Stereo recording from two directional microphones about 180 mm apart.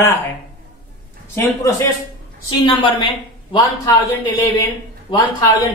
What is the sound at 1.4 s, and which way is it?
Speech, 15° left (ahead or behind).